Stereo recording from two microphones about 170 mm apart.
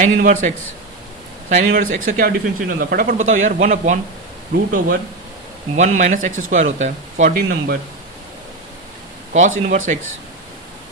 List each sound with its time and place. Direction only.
0.0 s speech: 50° right (ahead or behind)
3.2 s speech: 45° right (ahead or behind)
5.7 s speech: 45° right (ahead or behind)
9.3 s speech: 45° right (ahead or behind)